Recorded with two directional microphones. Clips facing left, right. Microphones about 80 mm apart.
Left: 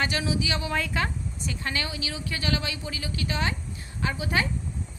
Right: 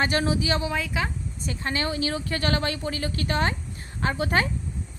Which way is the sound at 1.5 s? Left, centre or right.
Right.